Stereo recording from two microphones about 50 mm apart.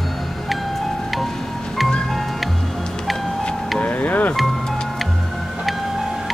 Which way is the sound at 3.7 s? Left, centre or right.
Left.